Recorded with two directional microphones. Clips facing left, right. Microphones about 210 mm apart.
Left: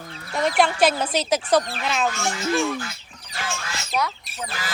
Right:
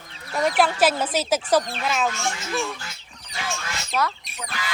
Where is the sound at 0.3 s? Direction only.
Centre (ahead or behind).